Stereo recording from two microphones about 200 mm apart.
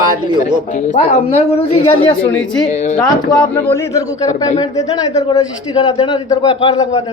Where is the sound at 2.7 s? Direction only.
35° left (ahead or behind).